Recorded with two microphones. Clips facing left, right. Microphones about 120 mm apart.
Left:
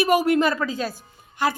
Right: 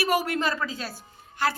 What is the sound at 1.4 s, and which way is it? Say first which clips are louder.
Speech: left 3 dB; 15° left (ahead or behind).